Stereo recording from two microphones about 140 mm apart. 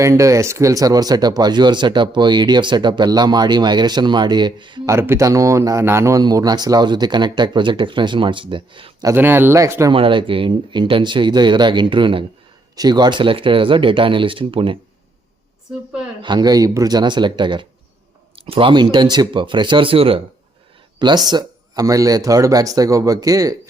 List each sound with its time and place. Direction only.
0.0 s speech: 20° right (ahead or behind)
4.9 s speech: 20° right (ahead or behind); by 9.0 s 35° right (ahead or behind)
9.0 s speech: 15° right (ahead or behind)
9.9 s speech: 40° right (ahead or behind)
16.2 s speech: 30° right (ahead or behind)